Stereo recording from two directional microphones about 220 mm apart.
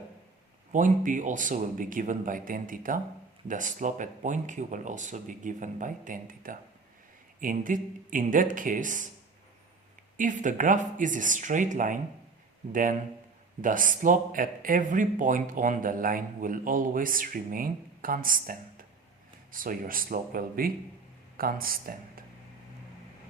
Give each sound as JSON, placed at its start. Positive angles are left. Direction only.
{"t": 0.7, "sound": "speech", "side_deg": -35}
{"t": 10.2, "sound": "speech", "side_deg": -35}